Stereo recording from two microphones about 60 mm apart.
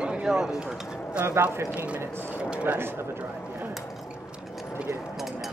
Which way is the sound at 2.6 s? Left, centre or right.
Right.